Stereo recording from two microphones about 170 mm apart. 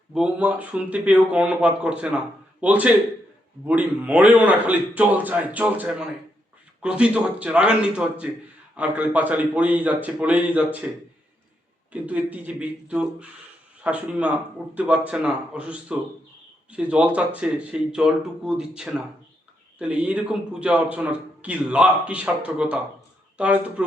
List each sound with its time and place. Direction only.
0.1 s speech: 5° right (ahead or behind)
11.9 s speech: 10° right (ahead or behind)